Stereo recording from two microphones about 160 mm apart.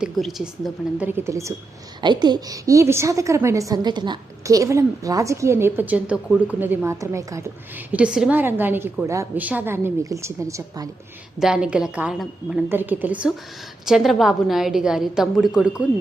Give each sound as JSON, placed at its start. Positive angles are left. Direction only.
{"t": 0.0, "sound": "a woman's voice", "side_deg": 0}
{"t": 7.9, "sound": "a woman's voice", "side_deg": -5}
{"t": 11.3, "sound": "a woman's voice", "side_deg": -5}